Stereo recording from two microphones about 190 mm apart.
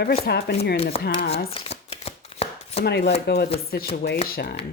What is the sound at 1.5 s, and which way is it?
Chopping, 30° left (ahead or behind).